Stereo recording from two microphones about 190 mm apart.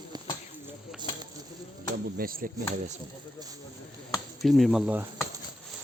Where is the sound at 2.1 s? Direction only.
50° right (ahead or behind).